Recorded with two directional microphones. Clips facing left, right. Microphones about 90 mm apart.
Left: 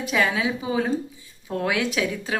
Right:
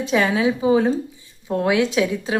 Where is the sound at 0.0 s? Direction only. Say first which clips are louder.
Right 4 dB; 30° right (ahead or behind).